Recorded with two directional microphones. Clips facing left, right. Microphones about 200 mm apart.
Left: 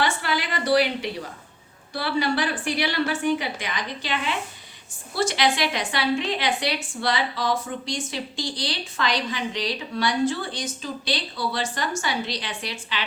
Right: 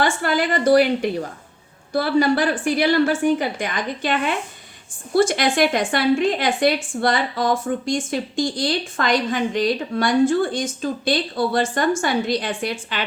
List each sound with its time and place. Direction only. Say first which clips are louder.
0.0 s speech: right 5 dB; 50° right (ahead or behind)